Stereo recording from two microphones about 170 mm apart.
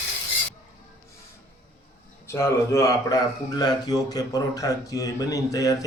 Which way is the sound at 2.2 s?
15° left (ahead or behind).